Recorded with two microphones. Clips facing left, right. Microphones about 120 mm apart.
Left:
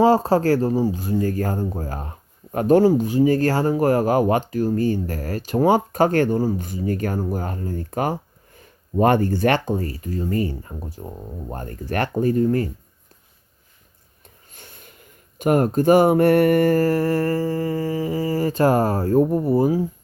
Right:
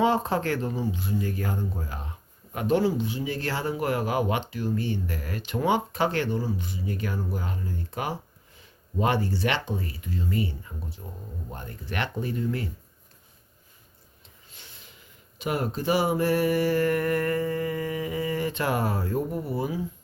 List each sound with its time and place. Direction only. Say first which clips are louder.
0.0 s speech: left 8 dB; 35° left (ahead or behind)
14.5 s speech: left 6 dB; 50° left (ahead or behind)